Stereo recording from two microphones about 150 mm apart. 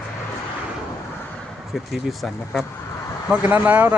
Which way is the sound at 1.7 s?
Centre (ahead or behind).